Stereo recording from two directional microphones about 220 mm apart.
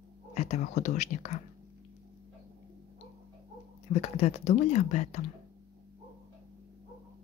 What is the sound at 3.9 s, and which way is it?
Speech, 30° left (ahead or behind).